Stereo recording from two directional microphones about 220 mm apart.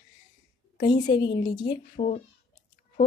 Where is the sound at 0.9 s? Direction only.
20° left (ahead or behind).